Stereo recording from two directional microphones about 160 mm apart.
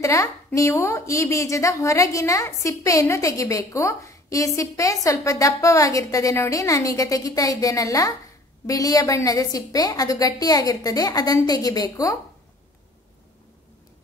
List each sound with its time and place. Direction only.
0.0 s a woman's voice: 20° left (ahead or behind)